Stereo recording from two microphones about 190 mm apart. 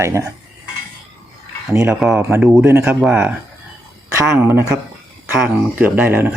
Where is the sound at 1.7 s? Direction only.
15° right (ahead or behind).